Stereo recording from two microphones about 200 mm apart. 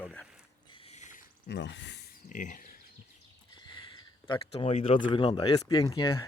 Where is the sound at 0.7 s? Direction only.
30° left (ahead or behind).